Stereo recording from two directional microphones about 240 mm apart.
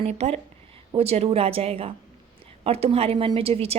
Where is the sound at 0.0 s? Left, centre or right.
Right.